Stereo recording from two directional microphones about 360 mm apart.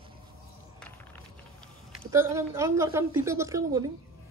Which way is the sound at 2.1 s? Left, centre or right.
Centre.